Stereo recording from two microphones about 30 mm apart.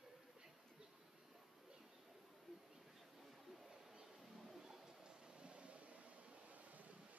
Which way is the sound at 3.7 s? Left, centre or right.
Right.